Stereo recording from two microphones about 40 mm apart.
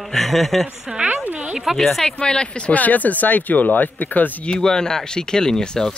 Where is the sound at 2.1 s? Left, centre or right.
Left.